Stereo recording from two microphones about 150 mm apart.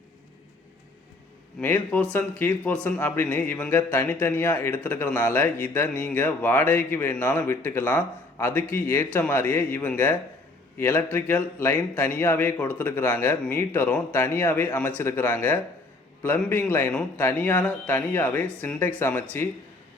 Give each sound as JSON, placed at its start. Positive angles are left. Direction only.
{"t": 1.6, "sound": "a man's voice", "side_deg": 10}